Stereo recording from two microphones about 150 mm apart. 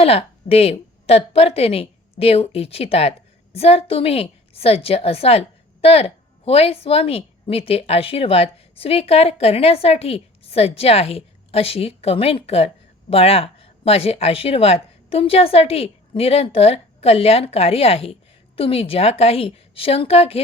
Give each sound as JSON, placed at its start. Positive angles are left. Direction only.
{"t": 0.0, "sound": "a woman's voice", "side_deg": 40}